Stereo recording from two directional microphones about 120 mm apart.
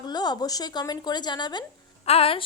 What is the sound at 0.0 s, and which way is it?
A woman's voice, 35° left (ahead or behind).